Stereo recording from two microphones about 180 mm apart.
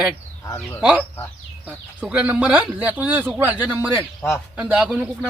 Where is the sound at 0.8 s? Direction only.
5° right (ahead or behind).